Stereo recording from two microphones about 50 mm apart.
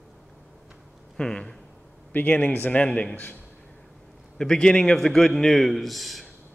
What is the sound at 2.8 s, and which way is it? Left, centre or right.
Speech, left.